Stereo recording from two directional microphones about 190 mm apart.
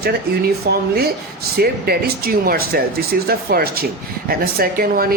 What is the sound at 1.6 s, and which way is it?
Speech, 55° right (ahead or behind).